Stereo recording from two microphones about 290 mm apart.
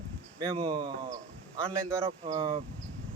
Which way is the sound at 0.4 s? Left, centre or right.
Centre.